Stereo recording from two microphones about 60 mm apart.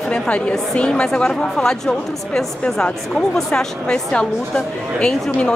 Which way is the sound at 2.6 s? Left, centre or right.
Centre.